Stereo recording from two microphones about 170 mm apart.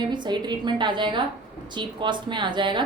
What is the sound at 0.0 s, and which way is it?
A woman's voice, 25° right (ahead or behind).